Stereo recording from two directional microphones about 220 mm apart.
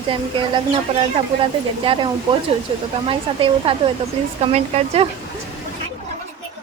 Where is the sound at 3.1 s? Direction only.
25° right (ahead or behind).